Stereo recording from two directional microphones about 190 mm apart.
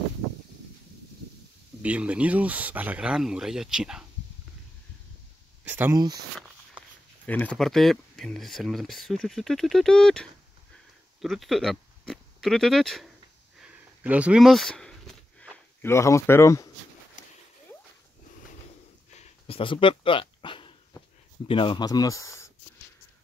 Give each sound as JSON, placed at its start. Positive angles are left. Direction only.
{"t": 1.8, "sound": "speech", "side_deg": -5}
{"t": 5.6, "sound": "speech", "side_deg": -10}
{"t": 5.9, "sound": "speech", "side_deg": -20}
{"t": 6.8, "sound": "a sound", "side_deg": -5}
{"t": 7.2, "sound": "speech", "side_deg": 10}
{"t": 13.6, "sound": "a sound", "side_deg": -5}
{"t": 15.8, "sound": "speech", "side_deg": 15}
{"t": 17.2, "sound": "splash", "side_deg": 45}
{"t": 19.1, "sound": "a sound", "side_deg": 35}
{"t": 21.5, "sound": "speech", "side_deg": 25}